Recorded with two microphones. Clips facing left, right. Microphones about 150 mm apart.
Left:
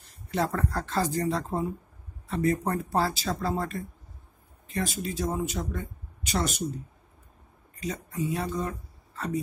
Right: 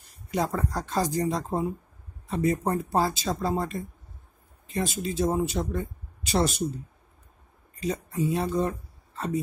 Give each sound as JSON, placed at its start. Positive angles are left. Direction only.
{"t": 0.3, "sound": "speech", "side_deg": -15}
{"t": 7.8, "sound": "speech", "side_deg": -30}